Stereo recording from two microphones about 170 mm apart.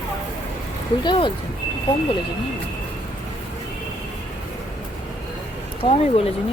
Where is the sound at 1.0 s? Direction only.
30° left (ahead or behind).